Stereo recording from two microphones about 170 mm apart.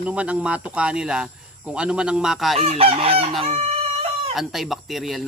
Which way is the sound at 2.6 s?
35° right (ahead or behind).